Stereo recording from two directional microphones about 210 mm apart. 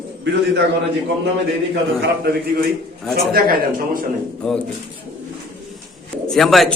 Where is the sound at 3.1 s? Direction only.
45° right (ahead or behind).